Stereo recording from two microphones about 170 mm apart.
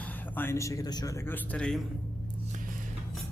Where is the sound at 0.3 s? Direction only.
15° left (ahead or behind).